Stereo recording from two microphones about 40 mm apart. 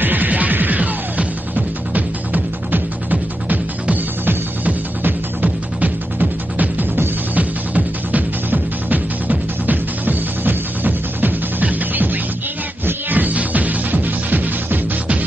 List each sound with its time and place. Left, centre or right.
0.0 s music: right
5.0 s music: right